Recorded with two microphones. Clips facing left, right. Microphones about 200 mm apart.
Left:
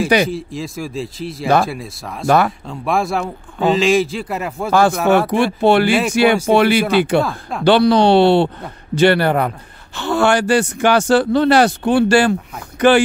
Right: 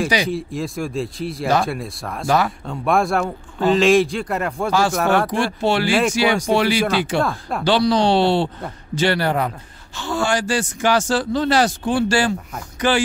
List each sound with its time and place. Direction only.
0.3 s speech: centre (ahead or behind)
2.2 s speech: 55° left (ahead or behind)
2.6 s speech: centre (ahead or behind)
4.6 s speech: 55° left (ahead or behind)
4.9 s speech: centre (ahead or behind)
5.3 s speech: 60° left (ahead or behind)